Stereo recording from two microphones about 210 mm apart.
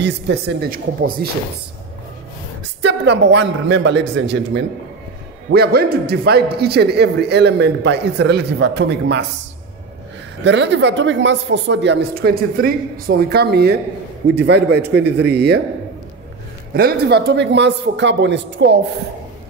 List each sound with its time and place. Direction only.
0.0 s a man's voice: 55° right (ahead or behind)
2.8 s a woman's voice: 55° right (ahead or behind)
10.4 s a woman's voice: 60° right (ahead or behind)
16.7 s a woman's voice: 50° right (ahead or behind)